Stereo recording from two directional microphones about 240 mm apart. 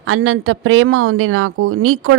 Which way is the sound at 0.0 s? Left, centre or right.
Right.